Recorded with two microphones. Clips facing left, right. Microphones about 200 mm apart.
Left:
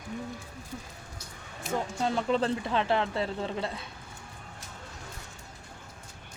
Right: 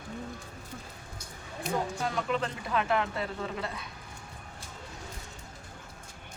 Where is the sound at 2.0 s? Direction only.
30° left (ahead or behind).